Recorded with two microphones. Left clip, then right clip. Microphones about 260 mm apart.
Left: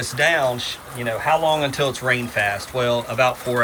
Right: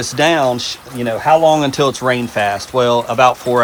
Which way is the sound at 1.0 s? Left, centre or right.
Right.